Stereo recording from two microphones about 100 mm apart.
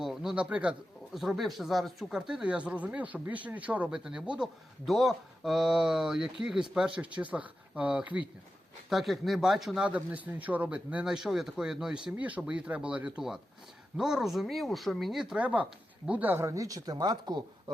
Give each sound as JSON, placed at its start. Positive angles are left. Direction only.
{"t": 0.0, "sound": "a sound", "side_deg": -5}
{"t": 0.4, "sound": "speech", "side_deg": -10}
{"t": 1.1, "sound": "speech", "side_deg": 0}
{"t": 8.9, "sound": "speech", "side_deg": 0}
{"t": 15.4, "sound": "speech", "side_deg": -15}
{"t": 16.4, "sound": "speech", "side_deg": -35}